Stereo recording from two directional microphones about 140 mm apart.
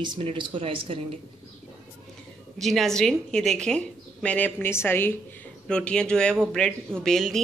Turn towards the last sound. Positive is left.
turn(degrees=5)  # may be behind; listen again after turning